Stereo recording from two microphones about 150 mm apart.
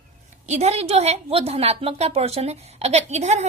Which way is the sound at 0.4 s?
50° right (ahead or behind).